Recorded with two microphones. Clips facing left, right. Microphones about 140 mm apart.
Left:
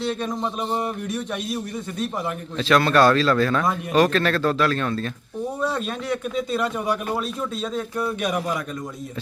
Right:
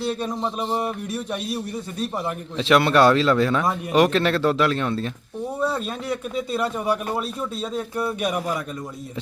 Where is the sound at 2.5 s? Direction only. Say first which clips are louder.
Right 1 dB; 20° right (ahead or behind).